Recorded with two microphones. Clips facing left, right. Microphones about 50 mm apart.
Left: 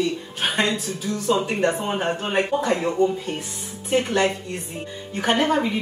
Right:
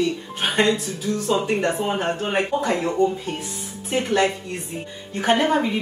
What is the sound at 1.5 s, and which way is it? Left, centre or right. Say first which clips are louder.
Speech: right 1 dB; centre.